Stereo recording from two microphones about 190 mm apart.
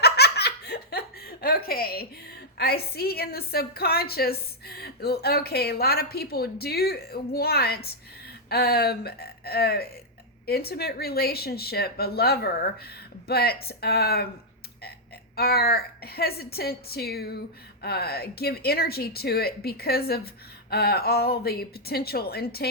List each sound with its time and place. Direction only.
0.0 s laughter: 60° left (ahead or behind)
2.6 s a woman's voice: 55° left (ahead or behind)
15.4 s a woman's voice: 55° left (ahead or behind)